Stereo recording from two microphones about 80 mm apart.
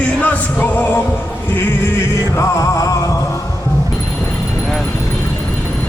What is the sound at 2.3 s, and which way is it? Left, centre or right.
Music, left.